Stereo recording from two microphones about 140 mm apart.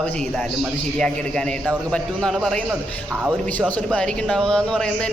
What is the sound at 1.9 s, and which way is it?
A man's voice, 5° left (ahead or behind).